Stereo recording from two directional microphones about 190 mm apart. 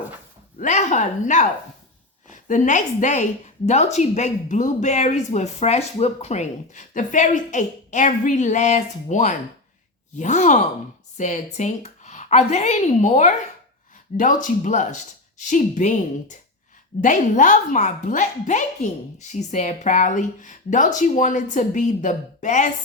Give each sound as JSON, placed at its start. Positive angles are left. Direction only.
{"t": 0.6, "sound": "a woman's voice", "side_deg": 40}